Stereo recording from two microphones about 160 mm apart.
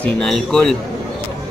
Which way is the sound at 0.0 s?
5° left (ahead or behind).